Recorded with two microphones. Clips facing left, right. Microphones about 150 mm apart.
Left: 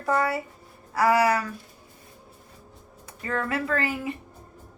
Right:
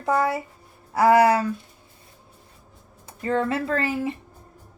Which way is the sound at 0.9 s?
25° right (ahead or behind).